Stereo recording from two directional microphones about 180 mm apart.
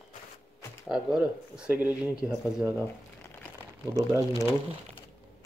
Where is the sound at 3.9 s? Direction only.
20° right (ahead or behind).